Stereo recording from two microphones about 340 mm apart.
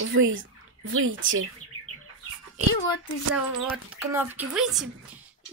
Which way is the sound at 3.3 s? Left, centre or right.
Centre.